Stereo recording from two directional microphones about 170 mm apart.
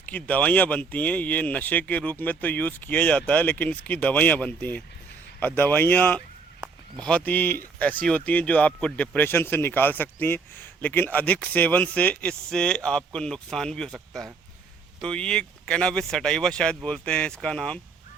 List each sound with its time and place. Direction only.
0.0 s speech: 10° left (ahead or behind)